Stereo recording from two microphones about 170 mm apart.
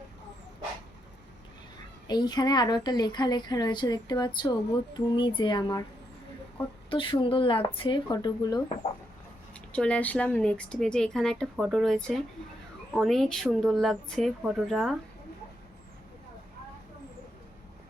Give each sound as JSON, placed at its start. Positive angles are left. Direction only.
{"t": 2.0, "sound": "speech", "side_deg": 25}
{"t": 6.9, "sound": "speech", "side_deg": 30}
{"t": 9.7, "sound": "a woman's voice", "side_deg": 5}